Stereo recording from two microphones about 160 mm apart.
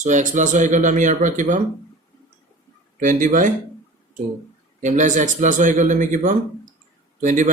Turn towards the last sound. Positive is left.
turn(degrees=-50)  # may be behind; listen again after turning